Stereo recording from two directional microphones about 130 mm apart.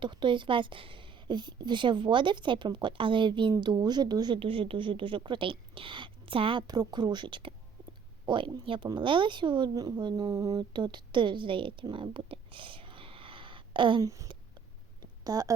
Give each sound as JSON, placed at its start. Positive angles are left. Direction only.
{"t": 0.0, "sound": "a woman's voice", "side_deg": -35}
{"t": 4.4, "sound": "a woman's voice", "side_deg": -45}
{"t": 14.0, "sound": "speech", "side_deg": -25}